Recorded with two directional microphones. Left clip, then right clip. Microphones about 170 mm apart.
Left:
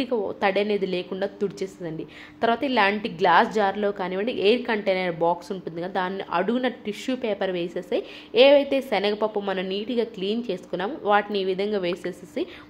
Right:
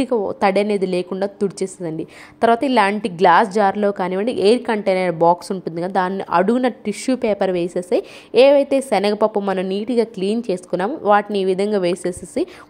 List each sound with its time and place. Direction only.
0.0 s a woman's voice: 40° right (ahead or behind)